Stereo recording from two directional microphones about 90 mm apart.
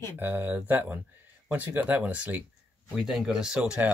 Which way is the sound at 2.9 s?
5° right (ahead or behind).